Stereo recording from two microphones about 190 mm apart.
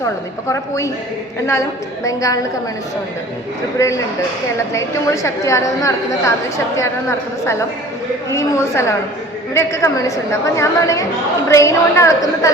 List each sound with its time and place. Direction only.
2.0 s a woman's voice: 15° left (ahead or behind)
3.8 s a woman's voice: 15° left (ahead or behind)
8.3 s a woman's voice: 15° left (ahead or behind)